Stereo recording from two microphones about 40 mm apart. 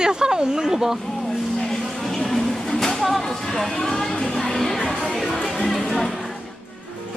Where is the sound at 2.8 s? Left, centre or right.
Centre.